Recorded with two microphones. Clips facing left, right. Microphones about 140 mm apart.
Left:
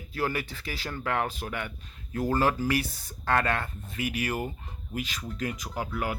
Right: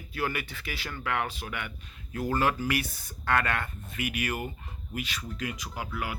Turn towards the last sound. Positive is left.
turn(degrees=45)  # may be behind; listen again after turning